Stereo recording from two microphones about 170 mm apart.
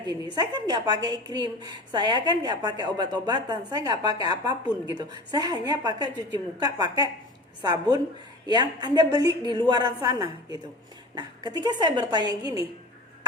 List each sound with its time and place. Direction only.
0.3 s a woman's voice: 25° right (ahead or behind)